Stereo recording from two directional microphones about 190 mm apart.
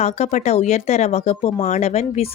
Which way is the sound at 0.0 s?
35° left (ahead or behind).